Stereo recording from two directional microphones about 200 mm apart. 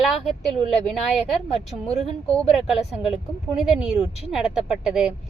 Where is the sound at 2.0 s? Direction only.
Centre (ahead or behind).